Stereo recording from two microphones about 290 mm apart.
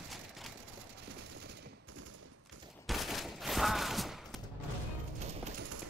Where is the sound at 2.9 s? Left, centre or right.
Centre.